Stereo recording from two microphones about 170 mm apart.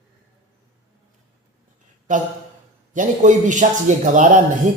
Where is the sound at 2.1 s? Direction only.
45° right (ahead or behind).